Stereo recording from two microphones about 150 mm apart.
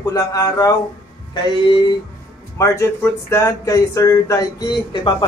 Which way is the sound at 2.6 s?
20° left (ahead or behind).